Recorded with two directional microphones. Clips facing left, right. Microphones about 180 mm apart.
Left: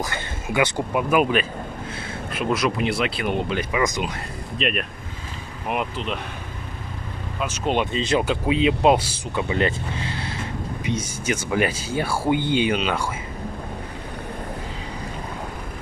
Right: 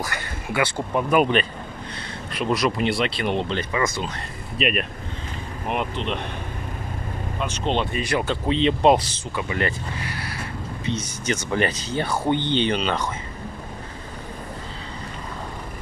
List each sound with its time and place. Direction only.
0.0 s a sound: 20° left (ahead or behind)
0.9 s speech: 5° left (ahead or behind)
4.6 s speech: 5° right (ahead or behind)
7.3 s speech: 5° left (ahead or behind); by 8.4 s 20° left (ahead or behind)
8.5 s speech: 5° left (ahead or behind)
9.3 s speech: 20° left (ahead or behind)